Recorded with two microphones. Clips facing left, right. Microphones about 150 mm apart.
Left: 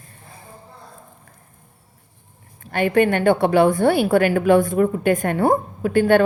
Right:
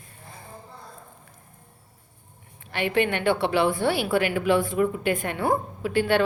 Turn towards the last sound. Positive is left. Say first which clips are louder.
# left 7 dB
turn(degrees=50)  # may be behind; listen again after turning